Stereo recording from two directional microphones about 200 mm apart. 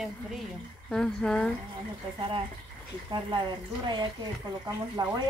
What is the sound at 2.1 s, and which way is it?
Speech, 25° right (ahead or behind).